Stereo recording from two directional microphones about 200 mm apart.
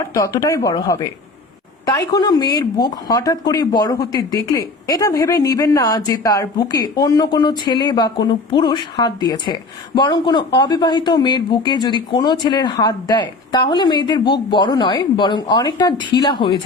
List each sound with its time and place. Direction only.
0.1 s speech: 15° left (ahead or behind)